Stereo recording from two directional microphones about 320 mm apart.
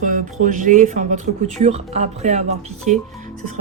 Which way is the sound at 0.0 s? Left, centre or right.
Right.